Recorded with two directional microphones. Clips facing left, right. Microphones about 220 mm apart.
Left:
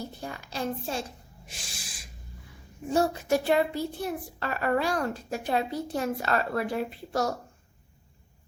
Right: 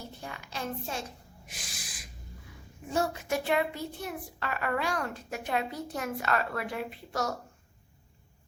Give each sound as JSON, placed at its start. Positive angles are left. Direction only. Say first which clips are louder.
{"t": 0.2, "sound": "a child's voice", "louder": "left 4 dB", "side_deg": 35}
{"t": 1.5, "sound": "a sound", "louder": "left 1 dB", "side_deg": 30}
{"t": 2.9, "sound": "a child's voice", "louder": "left 5 dB", "side_deg": 35}